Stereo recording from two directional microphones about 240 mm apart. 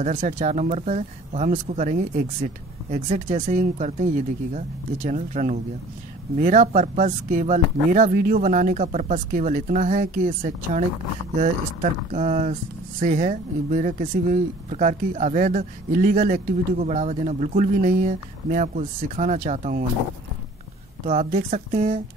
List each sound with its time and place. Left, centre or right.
0.0 s speech: right
21.1 s speech: right